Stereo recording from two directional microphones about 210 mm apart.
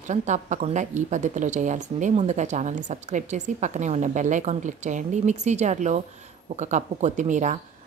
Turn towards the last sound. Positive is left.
turn(degrees=-35)  # may be behind; listen again after turning